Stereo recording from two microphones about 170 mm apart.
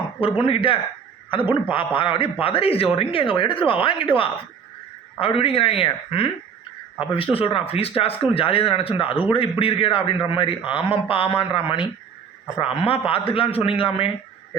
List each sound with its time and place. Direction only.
0.2 s a man's voice: 30° left (ahead or behind)